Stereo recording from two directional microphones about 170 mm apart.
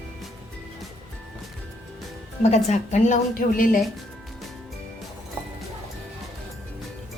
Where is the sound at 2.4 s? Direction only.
40° left (ahead or behind).